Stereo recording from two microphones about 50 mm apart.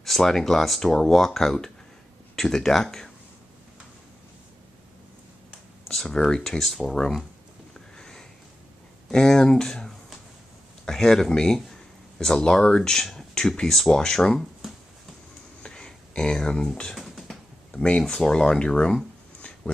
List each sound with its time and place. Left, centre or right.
0.0 s speech: centre
5.9 s speech: centre
8.0 s sniff: centre
9.1 s speech: centre
15.6 s a sound: centre
16.9 s music: centre
17.6 s speech: left